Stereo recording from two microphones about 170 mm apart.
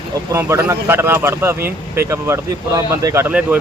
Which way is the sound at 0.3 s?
15° right (ahead or behind).